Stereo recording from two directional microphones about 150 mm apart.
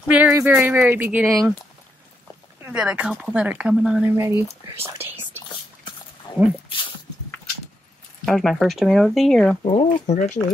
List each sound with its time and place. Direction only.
0.1 s speech: 15° right (ahead or behind)
2.6 s speech: 5° right (ahead or behind)
6.3 s dog: 30° left (ahead or behind)
8.3 s speech: centre (ahead or behind)
9.7 s speech: 45° left (ahead or behind)